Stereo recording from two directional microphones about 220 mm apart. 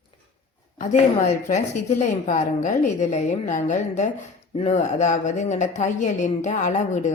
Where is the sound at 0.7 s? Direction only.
35° left (ahead or behind).